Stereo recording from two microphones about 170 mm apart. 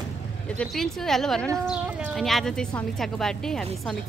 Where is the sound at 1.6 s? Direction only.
5° right (ahead or behind).